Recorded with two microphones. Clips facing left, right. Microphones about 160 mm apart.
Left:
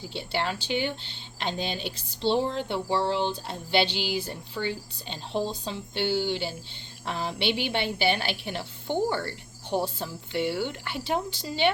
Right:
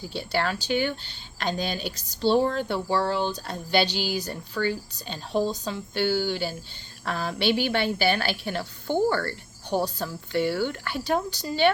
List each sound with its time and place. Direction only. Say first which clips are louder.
0.1 s speech: right 3 dB; 25° left (ahead or behind)